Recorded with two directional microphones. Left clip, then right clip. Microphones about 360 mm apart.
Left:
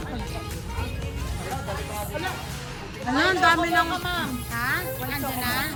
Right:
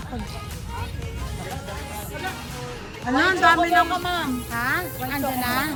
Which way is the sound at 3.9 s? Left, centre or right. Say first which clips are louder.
Right 3 dB; right.